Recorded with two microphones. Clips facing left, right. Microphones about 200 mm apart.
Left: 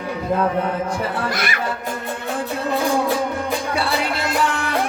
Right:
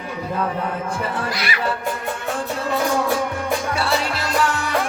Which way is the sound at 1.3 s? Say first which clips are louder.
Left 1 dB; 50° left (ahead or behind).